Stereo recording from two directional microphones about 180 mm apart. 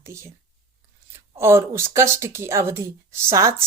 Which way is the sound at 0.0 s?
15° right (ahead or behind).